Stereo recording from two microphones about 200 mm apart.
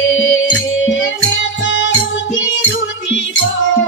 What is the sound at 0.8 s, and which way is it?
Music, 70° left (ahead or behind).